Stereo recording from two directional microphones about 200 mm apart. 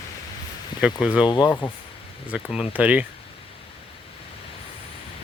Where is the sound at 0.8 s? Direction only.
5° right (ahead or behind).